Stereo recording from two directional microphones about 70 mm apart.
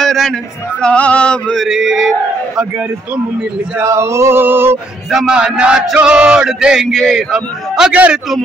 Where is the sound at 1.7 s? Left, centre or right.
Centre.